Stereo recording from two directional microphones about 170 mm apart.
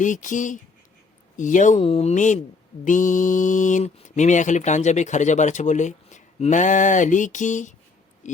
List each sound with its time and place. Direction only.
0.0 s speech: 50° left (ahead or behind)